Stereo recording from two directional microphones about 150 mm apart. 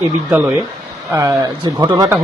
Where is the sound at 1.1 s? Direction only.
25° right (ahead or behind).